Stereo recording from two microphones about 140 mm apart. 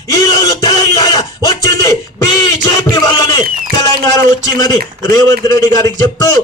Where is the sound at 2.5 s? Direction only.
30° left (ahead or behind).